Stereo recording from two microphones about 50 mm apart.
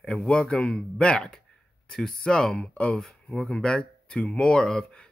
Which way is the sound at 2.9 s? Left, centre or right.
Centre.